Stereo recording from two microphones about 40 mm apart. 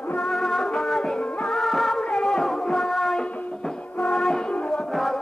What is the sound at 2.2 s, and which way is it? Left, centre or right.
Music, centre.